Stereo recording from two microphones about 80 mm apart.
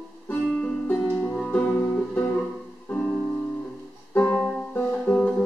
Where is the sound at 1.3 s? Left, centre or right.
Centre.